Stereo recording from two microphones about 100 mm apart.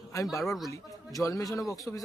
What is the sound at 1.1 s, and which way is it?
Speech, 35° left (ahead or behind).